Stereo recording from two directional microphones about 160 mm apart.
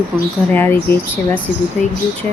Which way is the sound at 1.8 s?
5° left (ahead or behind).